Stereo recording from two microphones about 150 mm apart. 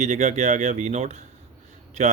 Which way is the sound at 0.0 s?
50° right (ahead or behind).